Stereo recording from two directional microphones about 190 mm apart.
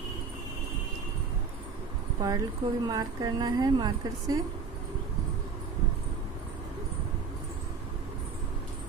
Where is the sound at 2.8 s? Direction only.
20° right (ahead or behind).